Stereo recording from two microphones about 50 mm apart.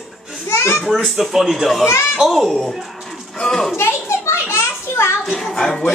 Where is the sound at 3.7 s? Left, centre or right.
Left.